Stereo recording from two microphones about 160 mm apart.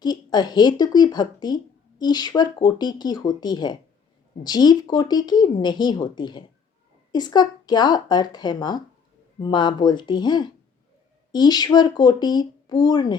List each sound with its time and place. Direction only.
0.0 s speech: 25° left (ahead or behind)